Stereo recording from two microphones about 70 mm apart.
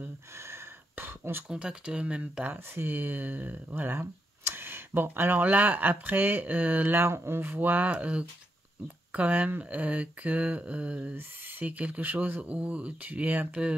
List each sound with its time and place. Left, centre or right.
0.0 s a sound: right
1.5 s speech: centre
2.5 s speech: right